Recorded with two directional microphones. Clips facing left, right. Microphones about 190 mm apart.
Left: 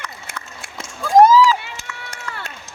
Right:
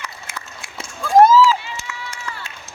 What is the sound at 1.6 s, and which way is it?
Run, 60° left (ahead or behind).